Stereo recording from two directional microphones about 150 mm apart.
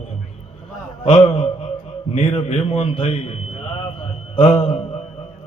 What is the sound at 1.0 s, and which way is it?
A man's voice, 40° left (ahead or behind).